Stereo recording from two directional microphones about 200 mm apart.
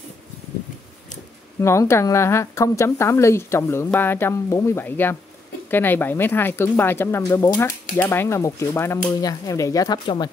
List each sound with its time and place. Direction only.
1.6 s speech: 15° left (ahead or behind)